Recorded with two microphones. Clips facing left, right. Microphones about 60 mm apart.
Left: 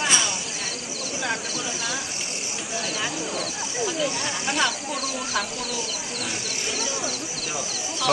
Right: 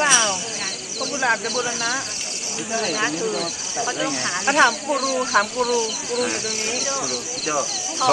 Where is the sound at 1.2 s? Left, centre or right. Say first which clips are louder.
Right 8 dB; right.